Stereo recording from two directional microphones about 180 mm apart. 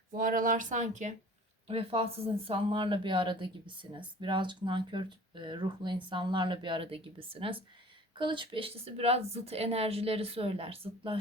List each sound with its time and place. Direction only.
0.1 s speech: 50° right (ahead or behind)
1.6 s a woman's voice: 30° right (ahead or behind)